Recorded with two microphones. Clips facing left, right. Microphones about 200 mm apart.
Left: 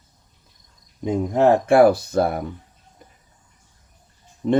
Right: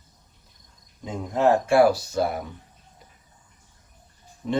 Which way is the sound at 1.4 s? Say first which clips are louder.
Left 4 dB; 55° left (ahead or behind).